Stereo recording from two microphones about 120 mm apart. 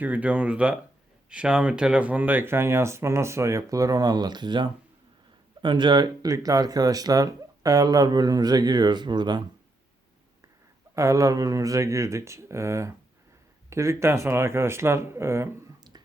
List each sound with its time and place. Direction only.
0.0 s speech: 15° right (ahead or behind); by 9.4 s 40° right (ahead or behind)
10.9 s speech: 25° right (ahead or behind)